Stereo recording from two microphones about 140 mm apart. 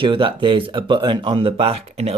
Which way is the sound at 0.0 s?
35° right (ahead or behind).